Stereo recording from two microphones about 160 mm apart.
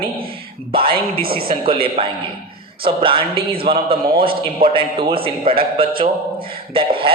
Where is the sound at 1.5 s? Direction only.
35° right (ahead or behind).